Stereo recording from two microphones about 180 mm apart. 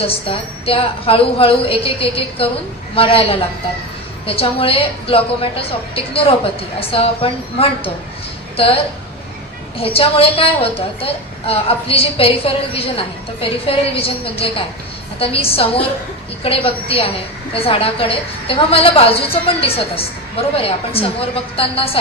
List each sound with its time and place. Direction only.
0.1 s a woman's voice: 30° left (ahead or behind)